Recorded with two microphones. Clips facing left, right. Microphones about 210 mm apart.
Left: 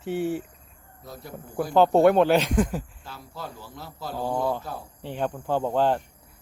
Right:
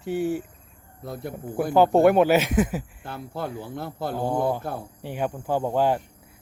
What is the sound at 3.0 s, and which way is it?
Speech, 55° right (ahead or behind).